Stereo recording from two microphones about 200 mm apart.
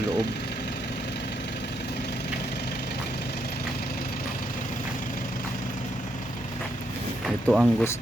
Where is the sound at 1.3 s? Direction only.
55° left (ahead or behind).